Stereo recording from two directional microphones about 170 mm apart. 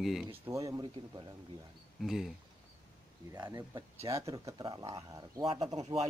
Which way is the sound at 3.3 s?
25° right (ahead or behind).